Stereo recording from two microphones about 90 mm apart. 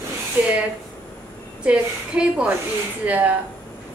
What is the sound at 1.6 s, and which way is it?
A woman's voice, 10° right (ahead or behind).